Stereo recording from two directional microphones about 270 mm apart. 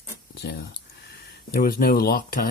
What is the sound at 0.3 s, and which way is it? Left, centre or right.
Speech, left.